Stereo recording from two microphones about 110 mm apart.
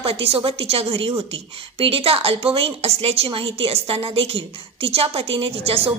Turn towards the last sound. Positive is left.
turn(degrees=-65)  # may be behind; listen again after turning